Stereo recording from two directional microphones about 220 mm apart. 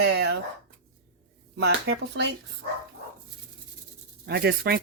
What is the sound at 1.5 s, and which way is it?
Speech, 50° right (ahead or behind).